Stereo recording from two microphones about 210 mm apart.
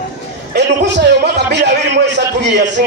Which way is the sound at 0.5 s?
55° right (ahead or behind).